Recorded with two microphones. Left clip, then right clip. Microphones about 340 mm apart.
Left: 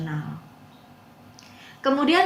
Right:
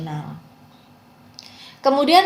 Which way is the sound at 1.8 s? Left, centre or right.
Centre.